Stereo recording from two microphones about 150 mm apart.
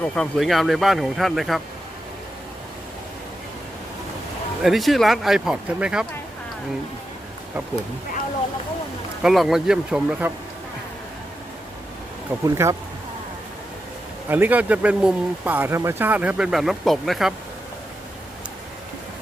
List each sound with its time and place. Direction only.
0.0 s speech: centre (ahead or behind)
4.6 s speech: centre (ahead or behind)
9.2 s speech: centre (ahead or behind)
12.3 s speech: 15° right (ahead or behind)
14.3 s speech: 15° right (ahead or behind)